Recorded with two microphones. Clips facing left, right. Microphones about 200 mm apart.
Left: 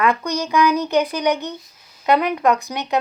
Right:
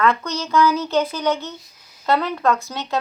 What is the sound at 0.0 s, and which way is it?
Speech, 15° left (ahead or behind).